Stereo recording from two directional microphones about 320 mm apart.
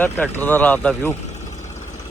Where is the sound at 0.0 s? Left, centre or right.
Centre.